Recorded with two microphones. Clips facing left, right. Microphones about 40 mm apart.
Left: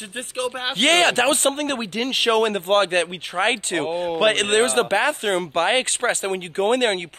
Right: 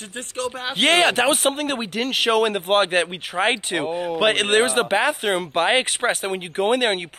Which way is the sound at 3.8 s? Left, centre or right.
Left.